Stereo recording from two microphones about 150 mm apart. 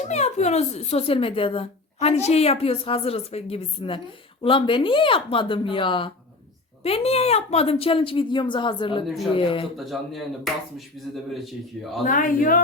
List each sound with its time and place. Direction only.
0.0 s speech: 50° left (ahead or behind)
9.7 s speech: centre (ahead or behind)
12.0 s a man's voice: 65° left (ahead or behind)